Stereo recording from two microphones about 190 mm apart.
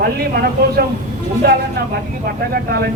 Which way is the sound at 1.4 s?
55° right (ahead or behind).